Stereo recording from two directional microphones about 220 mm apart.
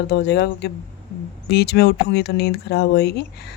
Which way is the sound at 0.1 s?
50° left (ahead or behind).